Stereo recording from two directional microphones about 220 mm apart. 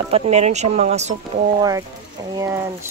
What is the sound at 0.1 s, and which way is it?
Speech, 30° right (ahead or behind).